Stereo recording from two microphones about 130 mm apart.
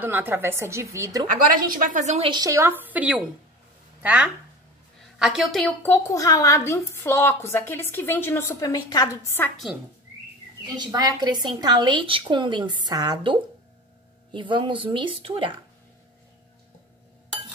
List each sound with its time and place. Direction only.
0.0 s a woman's voice: 15° right (ahead or behind)
1.5 s a woman's voice: 90° right; by 2.2 s 65° right (ahead or behind)
2.2 s a woman's voice: 30° right (ahead or behind); by 5.6 s centre (ahead or behind)
5.6 s a woman's voice: 15° left (ahead or behind)
8.6 s a woman's voice: 30° left (ahead or behind)
10.8 s a woman's voice: 35° right (ahead or behind)